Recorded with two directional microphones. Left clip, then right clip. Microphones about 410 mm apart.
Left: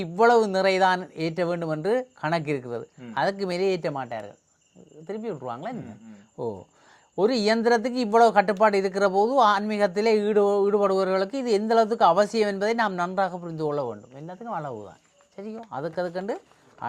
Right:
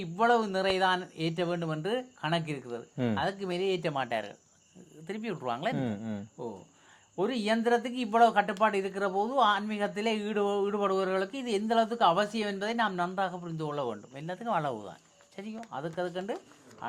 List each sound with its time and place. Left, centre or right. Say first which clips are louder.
0.0 s speech: left 7 dB; left
3.9 s speech: even; left
6.4 s speech: left 9 dB; left
13.8 s speech: left 2 dB; left
15.7 s speech: left 5 dB; left